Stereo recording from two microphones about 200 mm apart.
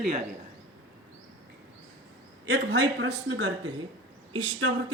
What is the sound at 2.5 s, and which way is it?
Speech, 80° right.